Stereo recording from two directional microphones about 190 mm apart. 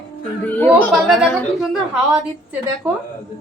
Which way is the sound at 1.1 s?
Centre (ahead or behind).